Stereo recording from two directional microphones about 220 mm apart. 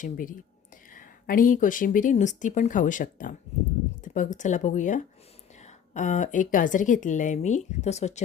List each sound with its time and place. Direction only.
0.0 s a woman's voice: 40° left (ahead or behind)